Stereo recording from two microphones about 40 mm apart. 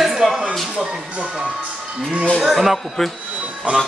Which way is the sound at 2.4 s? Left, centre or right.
Centre.